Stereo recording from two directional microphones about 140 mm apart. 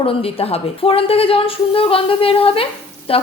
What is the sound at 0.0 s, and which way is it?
A woman's voice, 45° left (ahead or behind).